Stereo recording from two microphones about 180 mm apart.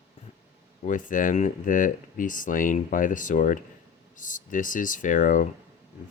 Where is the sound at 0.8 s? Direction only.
45° left (ahead or behind).